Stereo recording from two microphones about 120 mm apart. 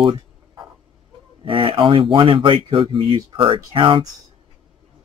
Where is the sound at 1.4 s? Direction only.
45° right (ahead or behind).